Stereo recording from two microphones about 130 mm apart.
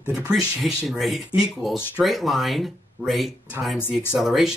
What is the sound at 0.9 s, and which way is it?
Speech, centre (ahead or behind).